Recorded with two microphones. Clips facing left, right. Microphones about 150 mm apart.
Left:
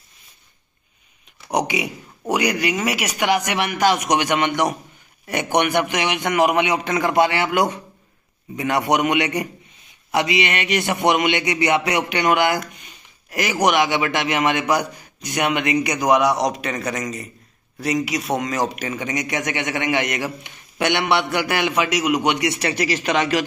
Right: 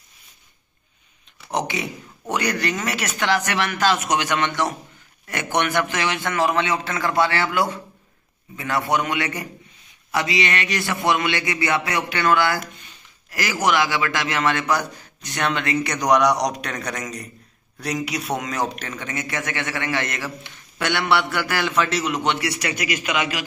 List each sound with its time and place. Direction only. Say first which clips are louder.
1.5 s a man's voice: left 3 dB; 15° left (ahead or behind)
22.5 s speech: left 4 dB; 30° left (ahead or behind)